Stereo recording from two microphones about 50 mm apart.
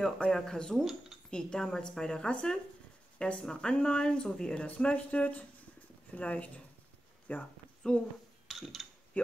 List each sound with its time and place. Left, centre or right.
0.0 s a woman's voice: centre; by 7.4 s left
7.8 s speech: centre
8.5 s a sound: centre
9.1 s speech: left